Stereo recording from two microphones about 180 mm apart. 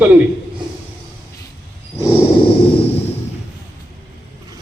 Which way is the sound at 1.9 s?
30° left (ahead or behind).